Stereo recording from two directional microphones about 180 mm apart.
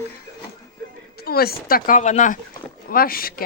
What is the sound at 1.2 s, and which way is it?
Speech, 60° left (ahead or behind).